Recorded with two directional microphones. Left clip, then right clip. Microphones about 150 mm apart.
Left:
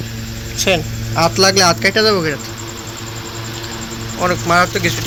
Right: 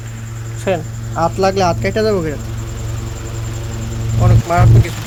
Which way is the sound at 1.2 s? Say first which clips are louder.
Left 2 dB; 10° right (ahead or behind).